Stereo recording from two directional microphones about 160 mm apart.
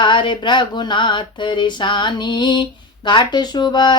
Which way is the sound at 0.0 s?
30° left (ahead or behind).